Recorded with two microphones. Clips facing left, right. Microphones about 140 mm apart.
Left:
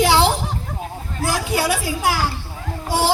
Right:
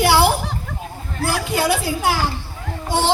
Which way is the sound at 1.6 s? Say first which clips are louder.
Right 2 dB; 20° right (ahead or behind).